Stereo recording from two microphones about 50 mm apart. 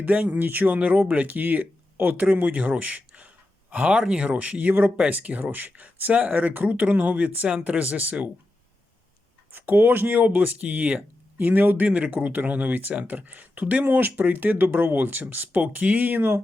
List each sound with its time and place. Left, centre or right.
0.0 s speech: right
9.5 s speech: right
11.9 s speech: right